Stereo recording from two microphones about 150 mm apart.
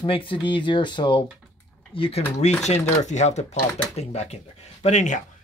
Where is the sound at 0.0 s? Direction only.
35° left (ahead or behind).